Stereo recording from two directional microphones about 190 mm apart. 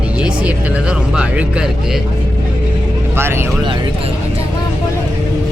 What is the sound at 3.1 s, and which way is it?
Speech, 10° right (ahead or behind).